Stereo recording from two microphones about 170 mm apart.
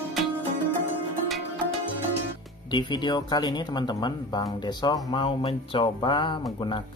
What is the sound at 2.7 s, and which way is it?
Speech, 25° left (ahead or behind).